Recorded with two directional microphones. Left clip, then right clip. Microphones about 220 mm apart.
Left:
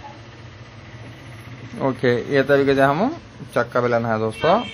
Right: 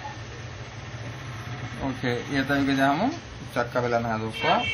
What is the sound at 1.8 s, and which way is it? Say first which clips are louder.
Speech: left 10 dB; 45° left (ahead or behind).